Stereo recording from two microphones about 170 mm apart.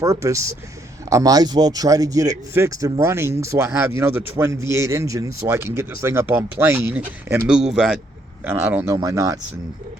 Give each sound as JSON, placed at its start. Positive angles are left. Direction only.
{"t": 0.0, "sound": "speech", "side_deg": -20}
{"t": 8.4, "sound": "speech", "side_deg": -15}